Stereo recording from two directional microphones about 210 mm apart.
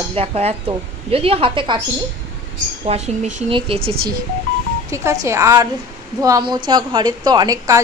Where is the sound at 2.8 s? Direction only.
30° right (ahead or behind).